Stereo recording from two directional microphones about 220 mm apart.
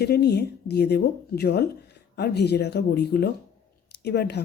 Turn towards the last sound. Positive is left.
turn(degrees=50)  # may be behind; listen again after turning